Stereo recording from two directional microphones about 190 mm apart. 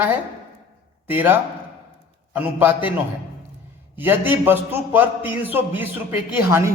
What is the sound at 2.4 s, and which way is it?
Speech, 10° right (ahead or behind).